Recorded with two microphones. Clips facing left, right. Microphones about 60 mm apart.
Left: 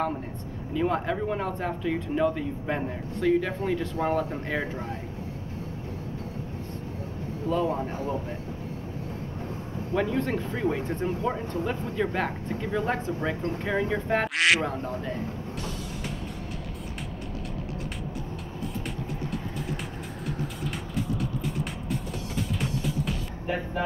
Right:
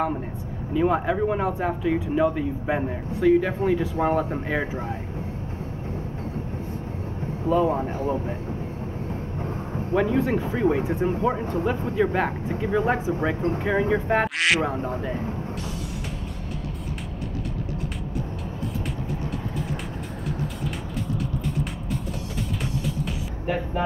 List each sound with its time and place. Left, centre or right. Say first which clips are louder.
0.7 s speech: right 5 dB; centre
7.4 s speech: right 5 dB; centre
9.9 s speech: right 5 dB; centre
14.7 s speech: right 4 dB; centre
23.4 s speech: right 4 dB; right